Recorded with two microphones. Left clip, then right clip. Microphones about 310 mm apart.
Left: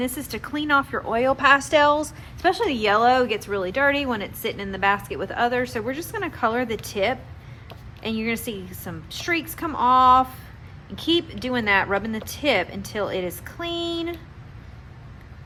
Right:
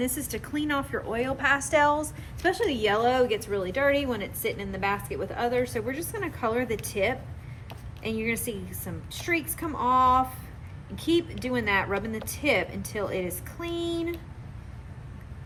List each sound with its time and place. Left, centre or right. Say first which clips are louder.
0.0 s a woman's voice: left 3 dB; centre